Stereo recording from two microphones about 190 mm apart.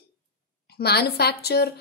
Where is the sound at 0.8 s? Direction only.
60° left (ahead or behind).